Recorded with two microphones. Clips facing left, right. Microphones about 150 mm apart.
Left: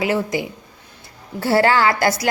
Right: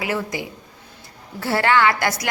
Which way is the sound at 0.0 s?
25° left (ahead or behind).